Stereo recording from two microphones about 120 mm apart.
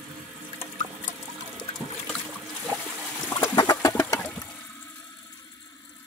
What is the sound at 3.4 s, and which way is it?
Chicken, 25° left (ahead or behind).